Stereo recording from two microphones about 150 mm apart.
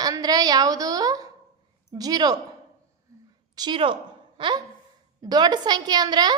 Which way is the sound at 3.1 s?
20° right (ahead or behind).